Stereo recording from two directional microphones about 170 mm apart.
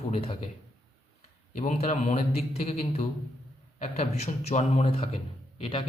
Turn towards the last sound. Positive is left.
turn(degrees=35)  # may be behind; listen again after turning